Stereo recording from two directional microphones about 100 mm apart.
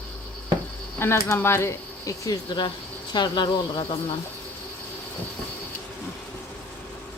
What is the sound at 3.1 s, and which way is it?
Speech, 50° left (ahead or behind).